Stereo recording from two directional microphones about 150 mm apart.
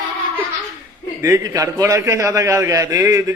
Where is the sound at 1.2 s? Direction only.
20° right (ahead or behind).